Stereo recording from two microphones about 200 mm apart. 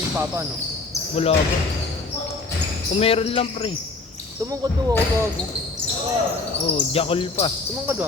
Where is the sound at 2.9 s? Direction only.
30° left (ahead or behind).